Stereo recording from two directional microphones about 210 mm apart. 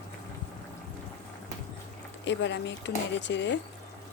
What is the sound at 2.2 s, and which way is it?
Speech, 60° left (ahead or behind).